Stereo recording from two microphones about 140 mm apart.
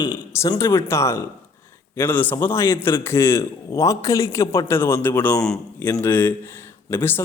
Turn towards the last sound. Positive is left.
turn(degrees=15)  # may be behind; listen again after turning